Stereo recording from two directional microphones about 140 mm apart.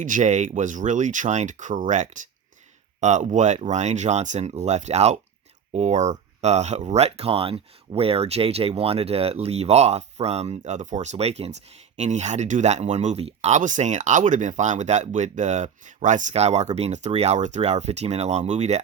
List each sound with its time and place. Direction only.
0.0 s speech: 60° right (ahead or behind)